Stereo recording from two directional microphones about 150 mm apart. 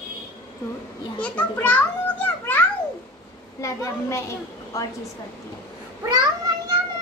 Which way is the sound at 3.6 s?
20° left (ahead or behind).